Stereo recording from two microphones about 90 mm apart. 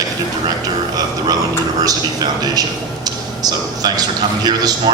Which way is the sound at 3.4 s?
45° right (ahead or behind).